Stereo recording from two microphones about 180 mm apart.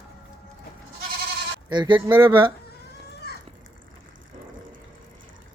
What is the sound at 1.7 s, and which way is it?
Speech, 25° right (ahead or behind).